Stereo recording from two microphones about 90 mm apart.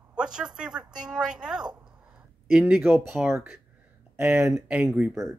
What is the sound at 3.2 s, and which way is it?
Speech, 10° right (ahead or behind).